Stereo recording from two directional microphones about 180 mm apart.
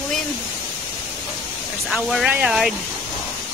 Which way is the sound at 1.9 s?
5° right (ahead or behind).